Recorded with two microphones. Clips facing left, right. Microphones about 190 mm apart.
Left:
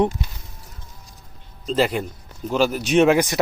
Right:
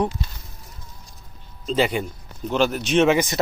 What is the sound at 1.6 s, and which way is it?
Speech, centre (ahead or behind).